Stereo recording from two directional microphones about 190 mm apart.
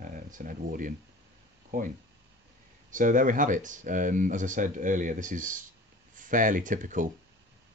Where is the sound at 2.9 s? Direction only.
45° right (ahead or behind).